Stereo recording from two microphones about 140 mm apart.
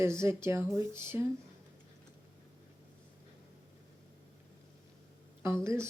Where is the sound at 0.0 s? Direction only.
20° right (ahead or behind).